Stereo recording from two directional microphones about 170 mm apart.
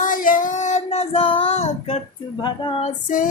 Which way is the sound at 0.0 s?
55° left (ahead or behind).